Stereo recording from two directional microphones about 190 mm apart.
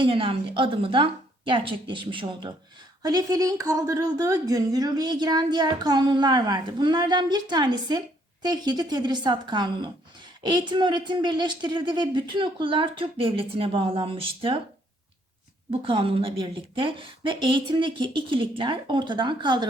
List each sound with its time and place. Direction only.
0.0 s speech: 30° right (ahead or behind)
15.7 s speech: 30° right (ahead or behind)